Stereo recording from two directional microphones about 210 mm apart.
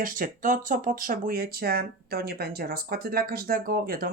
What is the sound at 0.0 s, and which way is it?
Speech, 40° right (ahead or behind).